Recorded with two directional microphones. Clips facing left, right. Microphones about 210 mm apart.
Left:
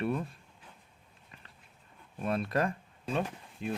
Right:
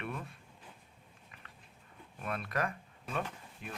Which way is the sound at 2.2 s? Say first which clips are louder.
Left 6 dB; 30° left (ahead or behind).